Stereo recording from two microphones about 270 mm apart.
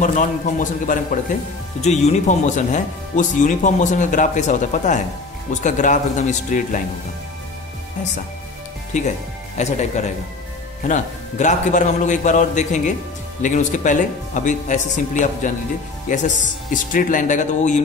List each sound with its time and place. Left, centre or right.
0.0 s speech: left
8.9 s speech: left